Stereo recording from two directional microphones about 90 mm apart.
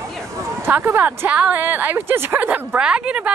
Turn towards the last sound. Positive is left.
turn(degrees=-10)  # may be behind; listen again after turning